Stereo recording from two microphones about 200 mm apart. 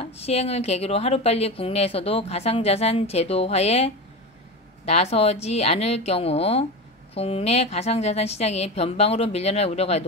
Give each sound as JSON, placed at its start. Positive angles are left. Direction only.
{"t": 0.0, "sound": "speech", "side_deg": 30}